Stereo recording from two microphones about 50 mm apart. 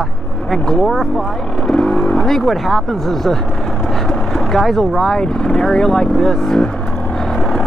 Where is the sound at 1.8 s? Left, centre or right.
Left.